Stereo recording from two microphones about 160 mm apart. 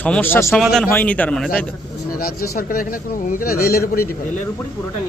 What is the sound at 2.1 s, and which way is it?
Speech, 70° left (ahead or behind).